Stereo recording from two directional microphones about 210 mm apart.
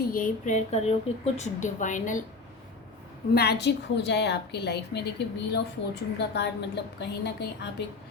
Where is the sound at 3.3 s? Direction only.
50° left (ahead or behind).